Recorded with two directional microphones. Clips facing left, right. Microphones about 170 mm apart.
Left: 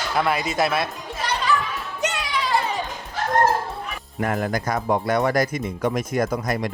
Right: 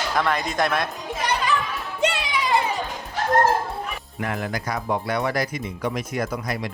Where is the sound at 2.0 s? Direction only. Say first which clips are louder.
Right 4 dB; 30° right (ahead or behind).